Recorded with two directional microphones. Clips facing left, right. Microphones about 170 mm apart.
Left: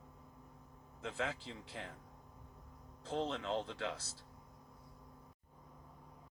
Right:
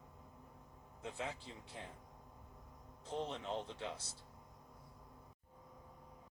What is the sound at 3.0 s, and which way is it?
Speech, 90° left.